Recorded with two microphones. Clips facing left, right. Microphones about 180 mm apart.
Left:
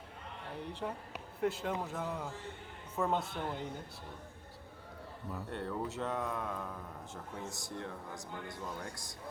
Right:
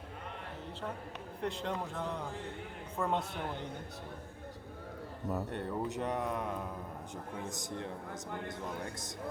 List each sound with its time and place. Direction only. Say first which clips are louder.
1.4 s a man's voice: left 2 dB; 5° left (ahead or behind)
5.5 s a man's voice: right 2 dB; 15° right (ahead or behind)